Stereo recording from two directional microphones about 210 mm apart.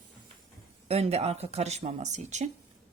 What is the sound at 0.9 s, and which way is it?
Speech, 30° right (ahead or behind).